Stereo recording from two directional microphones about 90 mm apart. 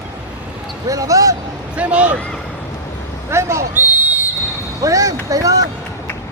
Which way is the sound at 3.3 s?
30° right (ahead or behind).